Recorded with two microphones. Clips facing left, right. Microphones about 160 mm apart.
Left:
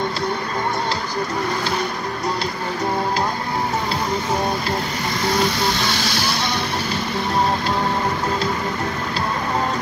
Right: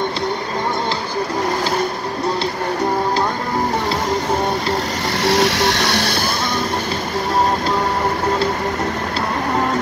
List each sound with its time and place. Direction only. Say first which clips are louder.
5.2 s vehicle: right 4 dB; 80° right; by 6.1 s 65° right (ahead or behind)